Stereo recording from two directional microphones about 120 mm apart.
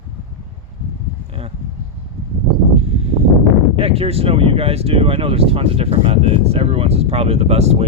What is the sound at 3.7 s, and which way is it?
Speech, 55° right (ahead or behind).